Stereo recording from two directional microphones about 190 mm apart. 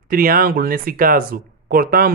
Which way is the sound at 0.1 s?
50° right (ahead or behind).